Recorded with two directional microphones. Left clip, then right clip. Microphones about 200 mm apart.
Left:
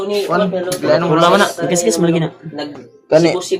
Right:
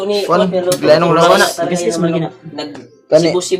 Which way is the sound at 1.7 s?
45° left (ahead or behind).